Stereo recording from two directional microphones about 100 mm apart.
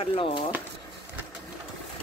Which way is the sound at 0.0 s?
60° left (ahead or behind).